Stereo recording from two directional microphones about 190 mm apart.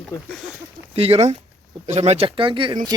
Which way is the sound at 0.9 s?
30° right (ahead or behind).